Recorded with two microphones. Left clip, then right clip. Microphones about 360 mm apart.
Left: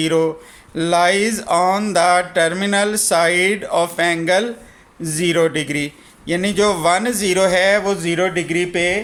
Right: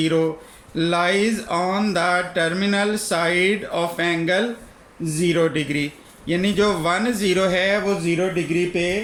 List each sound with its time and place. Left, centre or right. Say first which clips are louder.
0.0 s a man's voice: left 3 dB; centre